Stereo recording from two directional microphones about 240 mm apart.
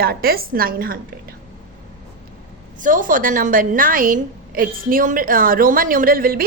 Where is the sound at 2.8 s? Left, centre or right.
Right.